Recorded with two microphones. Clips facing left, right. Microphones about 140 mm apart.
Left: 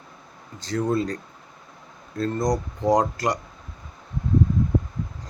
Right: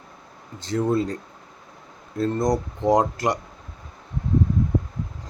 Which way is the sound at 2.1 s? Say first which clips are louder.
Right 2 dB; 25° right (ahead or behind).